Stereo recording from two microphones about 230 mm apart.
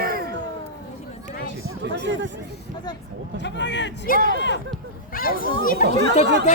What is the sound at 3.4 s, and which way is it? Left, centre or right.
Speech, left.